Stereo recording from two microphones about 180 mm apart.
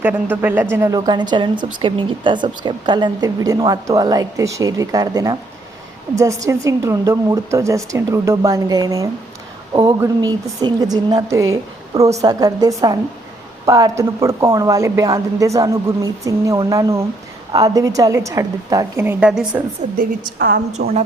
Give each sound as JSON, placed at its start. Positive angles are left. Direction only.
{"t": 0.0, "sound": "a woman's voice", "side_deg": -10}
{"t": 20.0, "sound": "a woman's voice", "side_deg": -55}